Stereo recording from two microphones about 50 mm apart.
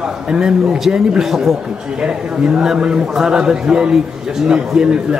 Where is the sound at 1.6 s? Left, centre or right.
Centre.